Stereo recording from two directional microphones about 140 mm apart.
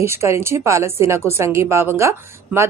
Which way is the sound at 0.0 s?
20° right (ahead or behind).